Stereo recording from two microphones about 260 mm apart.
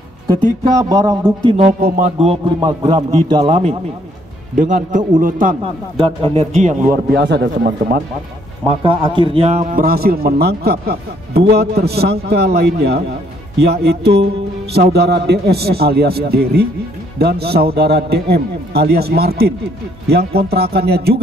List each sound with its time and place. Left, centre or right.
0.7 s a man's voice: centre
1.7 s a man's voice: right
8.8 s a man's voice: centre; by 21.2 s right